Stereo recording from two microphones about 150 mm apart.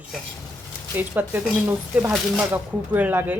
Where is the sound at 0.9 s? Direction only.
10° right (ahead or behind).